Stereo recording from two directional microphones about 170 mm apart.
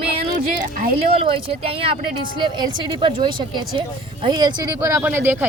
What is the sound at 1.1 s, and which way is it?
A woman's voice, 35° right (ahead or behind).